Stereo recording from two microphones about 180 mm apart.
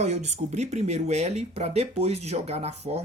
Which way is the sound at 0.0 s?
40° right (ahead or behind).